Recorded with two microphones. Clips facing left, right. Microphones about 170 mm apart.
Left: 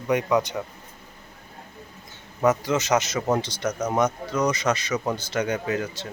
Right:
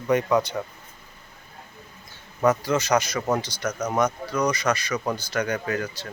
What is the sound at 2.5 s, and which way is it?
Speech, 20° left (ahead or behind).